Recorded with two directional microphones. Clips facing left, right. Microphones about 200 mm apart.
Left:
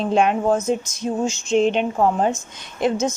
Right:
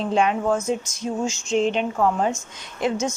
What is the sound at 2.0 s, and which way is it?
Speech, 35° left (ahead or behind).